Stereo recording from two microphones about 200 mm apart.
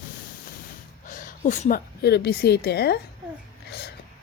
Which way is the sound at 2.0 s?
55° left (ahead or behind).